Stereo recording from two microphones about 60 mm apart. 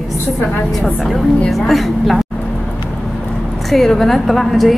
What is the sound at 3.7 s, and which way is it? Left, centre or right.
A woman's voice, centre.